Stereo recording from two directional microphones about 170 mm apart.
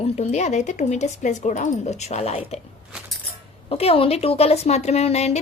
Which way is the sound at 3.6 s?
35° left (ahead or behind).